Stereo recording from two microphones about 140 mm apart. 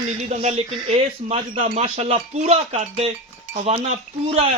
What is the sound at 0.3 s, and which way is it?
A man's voice, 50° right (ahead or behind).